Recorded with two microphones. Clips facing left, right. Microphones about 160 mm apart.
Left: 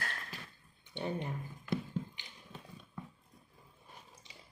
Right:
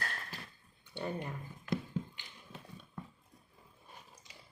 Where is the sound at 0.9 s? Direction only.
20° left (ahead or behind).